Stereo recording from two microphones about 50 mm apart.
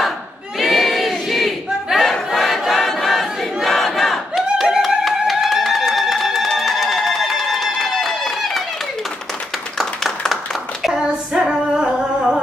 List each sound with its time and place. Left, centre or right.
0.6 s battle cry: centre
5.0 s music: centre
6.5 s a sound: centre
9.8 s clapping: centre
10.9 s female singing: centre
11.7 s humming: centre